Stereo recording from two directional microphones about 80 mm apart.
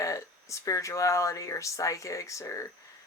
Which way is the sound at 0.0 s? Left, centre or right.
Left.